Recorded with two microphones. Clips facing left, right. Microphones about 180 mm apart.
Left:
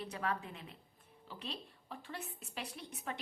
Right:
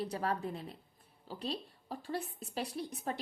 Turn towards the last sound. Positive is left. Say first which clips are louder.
# right 6 dB
turn(degrees=-35)  # may be behind; listen again after turning